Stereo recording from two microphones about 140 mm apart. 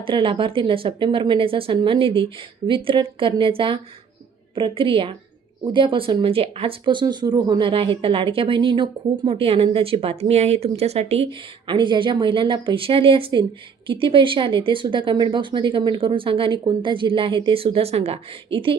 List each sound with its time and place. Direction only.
0.0 s speech: 40° right (ahead or behind)